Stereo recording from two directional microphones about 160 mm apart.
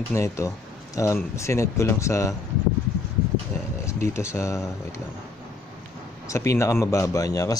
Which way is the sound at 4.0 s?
15° left (ahead or behind).